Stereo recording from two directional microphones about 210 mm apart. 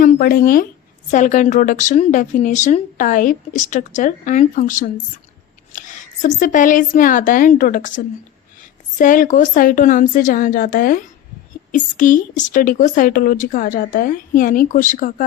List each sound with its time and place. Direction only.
0.0 s a woman's voice: 45° left (ahead or behind)
6.2 s a woman's voice: 40° left (ahead or behind)